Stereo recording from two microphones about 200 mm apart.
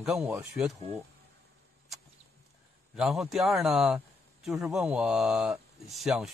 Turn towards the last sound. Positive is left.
turn(degrees=0)  # may be behind; listen again after turning